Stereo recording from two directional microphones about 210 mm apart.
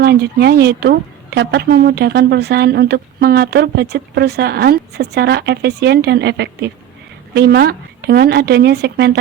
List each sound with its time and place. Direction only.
0.0 s a woman's voice: 50° right (ahead or behind)